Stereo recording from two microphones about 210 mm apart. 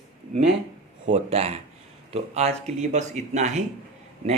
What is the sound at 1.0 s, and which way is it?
A man's voice, 30° right (ahead or behind).